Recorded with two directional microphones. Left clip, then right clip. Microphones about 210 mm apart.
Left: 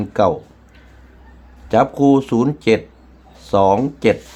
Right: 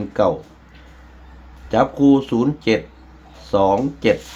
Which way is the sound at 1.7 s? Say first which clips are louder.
Left 2 dB; 40° left (ahead or behind).